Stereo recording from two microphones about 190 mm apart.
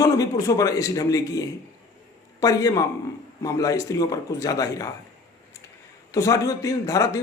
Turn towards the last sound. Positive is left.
turn(degrees=15)  # may be behind; listen again after turning